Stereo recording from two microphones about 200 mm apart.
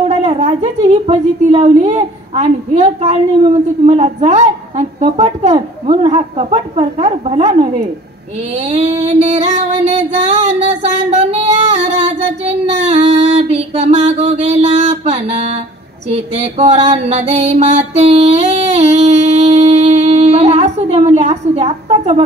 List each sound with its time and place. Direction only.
0.0 s a woman's voice: 30° right (ahead or behind)
8.5 s female singing: 30° right (ahead or behind)
14.4 s a sound: 30° right (ahead or behind)
14.9 s music: 30° right (ahead or behind)
16.1 s a woman's voice: 30° right (ahead or behind)
18.5 s a sound: 35° right (ahead or behind)